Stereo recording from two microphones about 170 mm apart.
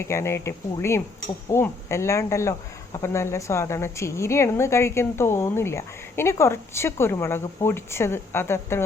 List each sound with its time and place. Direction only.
0.0 s speech: 15° left (ahead or behind)